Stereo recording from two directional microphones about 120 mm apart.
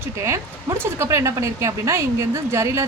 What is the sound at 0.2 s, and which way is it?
A woman's voice, 20° right (ahead or behind).